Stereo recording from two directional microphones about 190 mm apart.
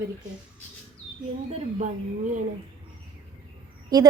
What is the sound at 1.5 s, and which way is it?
Speech, 40° right (ahead or behind).